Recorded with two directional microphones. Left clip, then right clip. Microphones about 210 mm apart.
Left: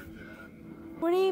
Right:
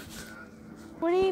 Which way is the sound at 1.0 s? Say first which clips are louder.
Right 1 dB; 10° left (ahead or behind).